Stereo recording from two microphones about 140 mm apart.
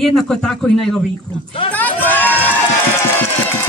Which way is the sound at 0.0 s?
5° left (ahead or behind).